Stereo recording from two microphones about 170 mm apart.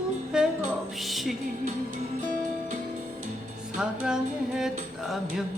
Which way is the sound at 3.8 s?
5° right (ahead or behind).